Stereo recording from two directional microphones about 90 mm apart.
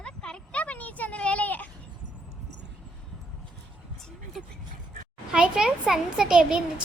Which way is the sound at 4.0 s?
5° left (ahead or behind).